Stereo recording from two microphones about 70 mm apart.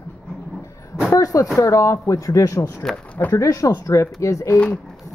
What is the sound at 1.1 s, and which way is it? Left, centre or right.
A woman's voice, left.